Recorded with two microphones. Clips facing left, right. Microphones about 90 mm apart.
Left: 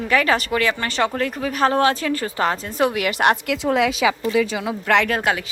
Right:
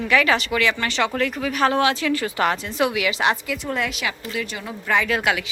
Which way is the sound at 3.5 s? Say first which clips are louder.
Left 7 dB; 90° left.